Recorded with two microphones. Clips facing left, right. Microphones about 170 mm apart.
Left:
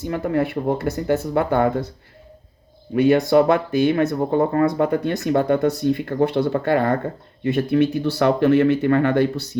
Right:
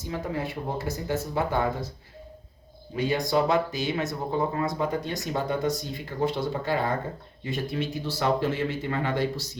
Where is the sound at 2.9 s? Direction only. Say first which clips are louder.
Left 10 dB; 60° left (ahead or behind).